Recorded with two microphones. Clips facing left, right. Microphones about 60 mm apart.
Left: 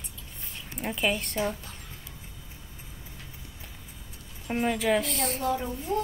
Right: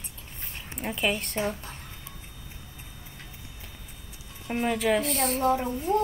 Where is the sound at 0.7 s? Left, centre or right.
Centre.